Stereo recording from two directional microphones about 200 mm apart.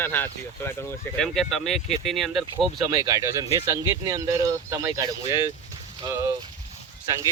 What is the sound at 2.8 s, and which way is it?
Speech, 20° right (ahead or behind).